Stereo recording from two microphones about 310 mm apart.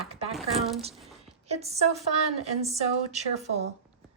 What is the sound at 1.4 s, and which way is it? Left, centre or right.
A woman's voice, right.